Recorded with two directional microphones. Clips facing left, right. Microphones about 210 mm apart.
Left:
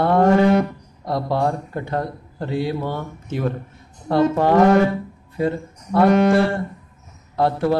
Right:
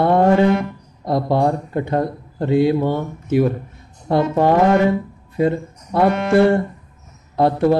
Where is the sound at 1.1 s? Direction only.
20° right (ahead or behind).